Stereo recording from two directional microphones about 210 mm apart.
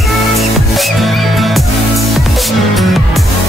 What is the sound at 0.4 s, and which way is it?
Music, centre (ahead or behind).